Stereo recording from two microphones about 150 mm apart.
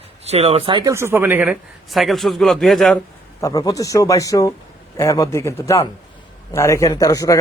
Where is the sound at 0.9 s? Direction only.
15° right (ahead or behind); by 3.0 s centre (ahead or behind).